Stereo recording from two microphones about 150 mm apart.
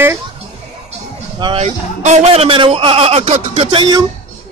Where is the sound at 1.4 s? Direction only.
35° right (ahead or behind).